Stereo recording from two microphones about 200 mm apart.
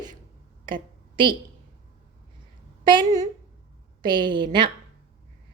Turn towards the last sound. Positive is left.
turn(degrees=-25)  # may be behind; listen again after turning